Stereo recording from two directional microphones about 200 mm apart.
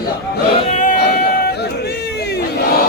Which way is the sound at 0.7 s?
40° left (ahead or behind).